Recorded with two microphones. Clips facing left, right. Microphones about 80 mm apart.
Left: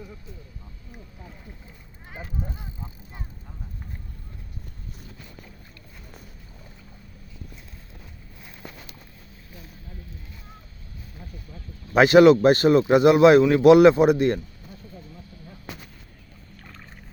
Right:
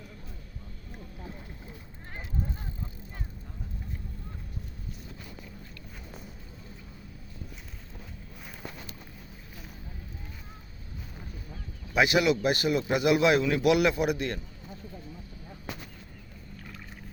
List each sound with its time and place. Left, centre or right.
11.9 s a man's voice: left